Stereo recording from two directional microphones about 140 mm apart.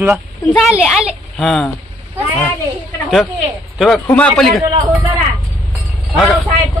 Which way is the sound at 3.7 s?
Centre (ahead or behind).